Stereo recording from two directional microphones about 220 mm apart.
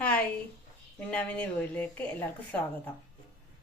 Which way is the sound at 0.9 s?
5° left (ahead or behind).